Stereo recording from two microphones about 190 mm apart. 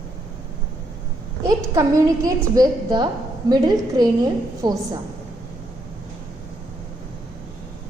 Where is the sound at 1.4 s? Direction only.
15° right (ahead or behind).